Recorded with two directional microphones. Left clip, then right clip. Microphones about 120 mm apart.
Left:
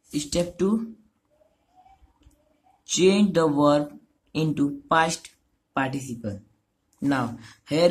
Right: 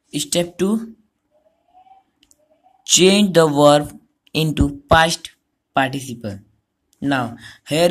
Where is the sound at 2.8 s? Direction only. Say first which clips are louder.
Right 7 dB; 30° right (ahead or behind).